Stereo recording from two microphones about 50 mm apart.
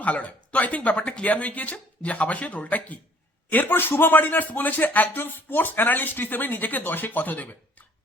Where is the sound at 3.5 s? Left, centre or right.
Left.